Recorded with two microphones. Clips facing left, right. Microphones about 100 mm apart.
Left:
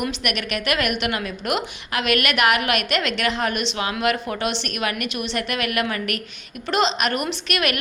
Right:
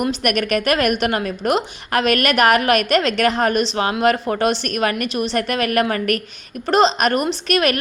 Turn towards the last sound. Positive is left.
turn(degrees=-40)  # may be behind; listen again after turning